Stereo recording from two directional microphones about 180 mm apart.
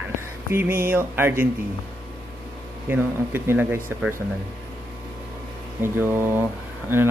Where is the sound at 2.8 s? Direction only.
10° right (ahead or behind).